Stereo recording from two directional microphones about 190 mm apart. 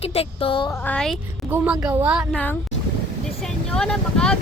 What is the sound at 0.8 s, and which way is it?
Speech, 5° left (ahead or behind).